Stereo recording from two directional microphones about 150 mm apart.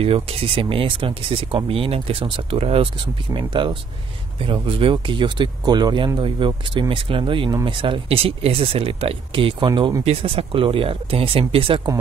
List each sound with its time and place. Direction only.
0.0 s speech: 40° right (ahead or behind)